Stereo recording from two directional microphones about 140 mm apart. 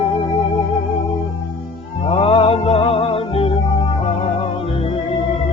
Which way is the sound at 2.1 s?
40° left (ahead or behind).